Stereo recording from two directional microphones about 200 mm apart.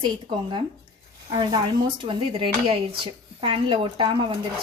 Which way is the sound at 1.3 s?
20° right (ahead or behind).